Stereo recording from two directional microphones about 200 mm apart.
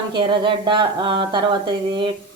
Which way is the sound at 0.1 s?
25° right (ahead or behind).